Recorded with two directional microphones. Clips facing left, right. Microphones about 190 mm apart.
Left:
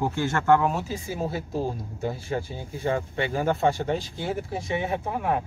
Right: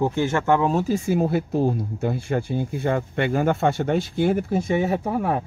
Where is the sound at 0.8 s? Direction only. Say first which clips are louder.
Right 9 dB; 55° right (ahead or behind).